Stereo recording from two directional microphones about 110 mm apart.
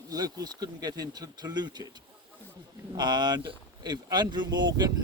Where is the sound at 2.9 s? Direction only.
40° right (ahead or behind).